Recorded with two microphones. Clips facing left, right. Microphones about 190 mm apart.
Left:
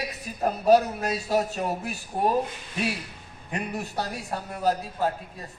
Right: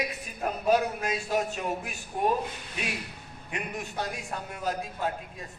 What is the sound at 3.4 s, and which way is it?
A man's voice, 35° left (ahead or behind).